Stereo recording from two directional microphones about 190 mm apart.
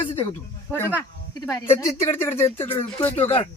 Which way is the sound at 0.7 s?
10° left (ahead or behind).